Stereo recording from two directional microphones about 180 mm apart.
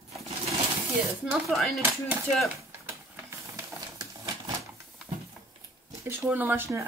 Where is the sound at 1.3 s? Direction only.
Centre (ahead or behind).